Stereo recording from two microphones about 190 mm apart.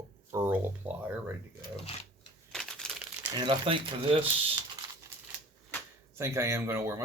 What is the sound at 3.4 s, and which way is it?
Speech, 25° right (ahead or behind).